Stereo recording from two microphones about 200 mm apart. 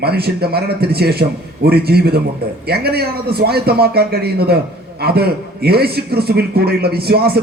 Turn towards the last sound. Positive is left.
turn(degrees=-50)  # may be behind; listen again after turning